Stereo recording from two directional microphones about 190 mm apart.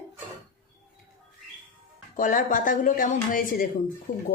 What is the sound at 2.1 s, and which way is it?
A woman's voice, 45° left (ahead or behind).